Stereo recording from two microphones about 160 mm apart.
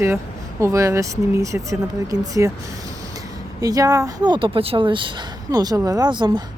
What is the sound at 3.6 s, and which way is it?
Speech, 20° right (ahead or behind).